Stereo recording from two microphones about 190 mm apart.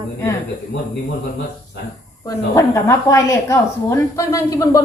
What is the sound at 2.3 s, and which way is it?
A woman's voice, 15° left (ahead or behind).